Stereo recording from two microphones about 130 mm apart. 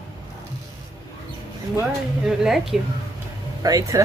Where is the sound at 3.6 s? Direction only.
25° right (ahead or behind).